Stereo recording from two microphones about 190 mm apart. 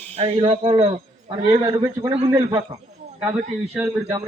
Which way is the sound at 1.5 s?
15° right (ahead or behind).